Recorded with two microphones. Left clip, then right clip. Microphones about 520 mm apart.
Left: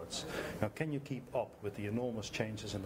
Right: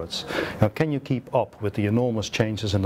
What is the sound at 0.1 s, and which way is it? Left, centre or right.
Speech, right.